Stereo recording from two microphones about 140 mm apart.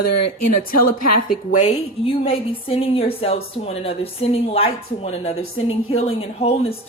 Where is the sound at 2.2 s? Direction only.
40° left (ahead or behind).